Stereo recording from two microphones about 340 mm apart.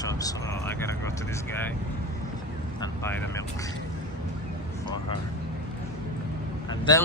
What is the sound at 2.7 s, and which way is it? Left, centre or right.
Speech, centre.